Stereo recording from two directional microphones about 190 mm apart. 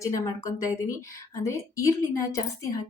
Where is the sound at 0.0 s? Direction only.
15° left (ahead or behind).